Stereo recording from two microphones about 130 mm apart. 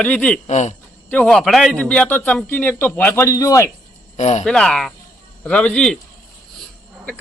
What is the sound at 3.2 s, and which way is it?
Speech, 25° left (ahead or behind).